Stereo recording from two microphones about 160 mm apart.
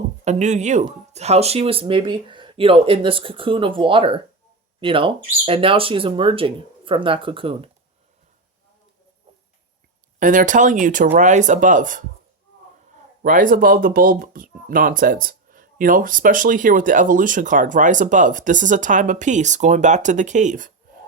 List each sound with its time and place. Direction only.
0.3 s speech: 45° right (ahead or behind)
10.2 s speech: 55° right (ahead or behind)
13.2 s speech: 60° right (ahead or behind)